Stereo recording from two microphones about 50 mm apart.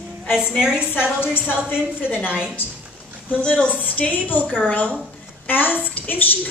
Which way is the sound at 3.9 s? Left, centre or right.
Left.